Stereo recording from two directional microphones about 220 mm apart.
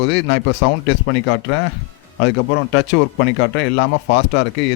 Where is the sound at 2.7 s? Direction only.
55° left (ahead or behind).